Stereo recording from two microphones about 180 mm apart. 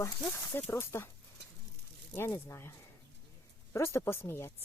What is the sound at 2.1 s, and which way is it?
Speech, 15° left (ahead or behind).